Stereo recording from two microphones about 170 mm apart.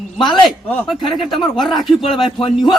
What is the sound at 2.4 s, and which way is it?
Speech, 30° left (ahead or behind).